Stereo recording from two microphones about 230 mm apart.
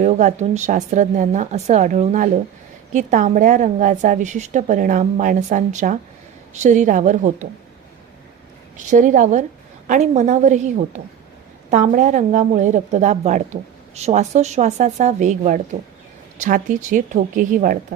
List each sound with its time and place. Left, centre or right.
0.0 s speech: right
8.8 s speech: right